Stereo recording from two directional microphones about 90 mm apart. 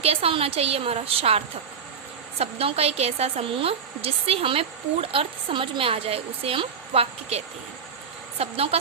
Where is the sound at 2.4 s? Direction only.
90° right.